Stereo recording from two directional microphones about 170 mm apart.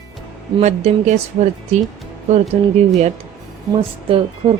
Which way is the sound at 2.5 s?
40° right (ahead or behind).